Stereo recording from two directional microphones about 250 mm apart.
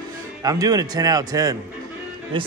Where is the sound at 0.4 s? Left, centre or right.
Centre.